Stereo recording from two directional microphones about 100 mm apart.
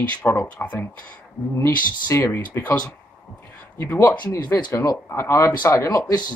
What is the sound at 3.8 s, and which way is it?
Speech, 20° left (ahead or behind).